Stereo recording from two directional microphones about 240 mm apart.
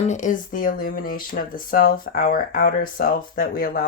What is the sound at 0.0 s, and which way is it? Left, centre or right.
Speech, left.